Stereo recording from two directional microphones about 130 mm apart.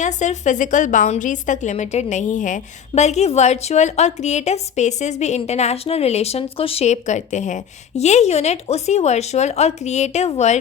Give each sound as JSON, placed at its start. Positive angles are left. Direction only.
{"t": 0.0, "sound": "a woman's voice", "side_deg": 65}